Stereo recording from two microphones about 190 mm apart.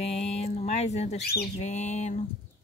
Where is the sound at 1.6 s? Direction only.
35° left (ahead or behind).